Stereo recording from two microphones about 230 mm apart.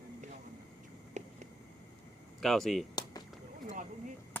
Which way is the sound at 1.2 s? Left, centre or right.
Right.